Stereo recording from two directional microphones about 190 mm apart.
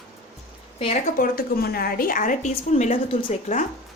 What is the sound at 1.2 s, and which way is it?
A woman's voice, 50° left (ahead or behind).